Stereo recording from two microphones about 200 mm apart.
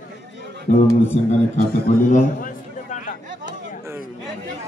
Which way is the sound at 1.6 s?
40° left (ahead or behind).